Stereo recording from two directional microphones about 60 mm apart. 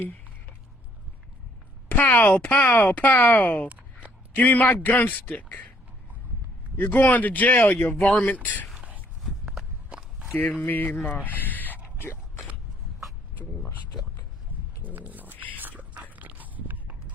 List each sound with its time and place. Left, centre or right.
1.9 s speech: left
3.7 s a sound: right
4.4 s speech: left
6.9 s speech: left
7.9 s speech: centre
8.3 s speech: left
9.2 s walk: centre
10.3 s speech: left
14.8 s bird: right
15.5 s whispering: right
16.1 s dog: right